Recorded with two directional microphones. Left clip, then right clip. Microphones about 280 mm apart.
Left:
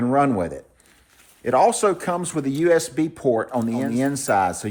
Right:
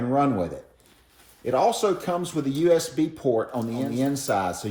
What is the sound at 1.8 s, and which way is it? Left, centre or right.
Speech, left.